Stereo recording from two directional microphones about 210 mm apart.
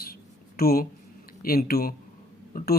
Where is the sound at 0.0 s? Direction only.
45° left (ahead or behind).